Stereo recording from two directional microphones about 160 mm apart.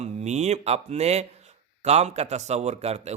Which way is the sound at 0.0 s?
45° right (ahead or behind).